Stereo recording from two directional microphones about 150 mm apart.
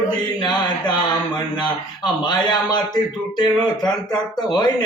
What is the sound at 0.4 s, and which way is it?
A man's voice, 30° left (ahead or behind).